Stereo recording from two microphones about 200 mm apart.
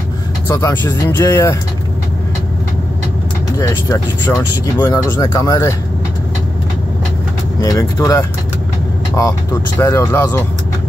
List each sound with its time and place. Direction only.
0.5 s speech: 15° left (ahead or behind)
3.5 s speech: 15° left (ahead or behind)
7.6 s speech: 15° left (ahead or behind)